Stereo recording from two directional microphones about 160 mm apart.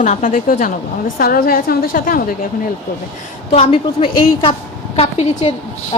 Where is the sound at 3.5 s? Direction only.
40° left (ahead or behind).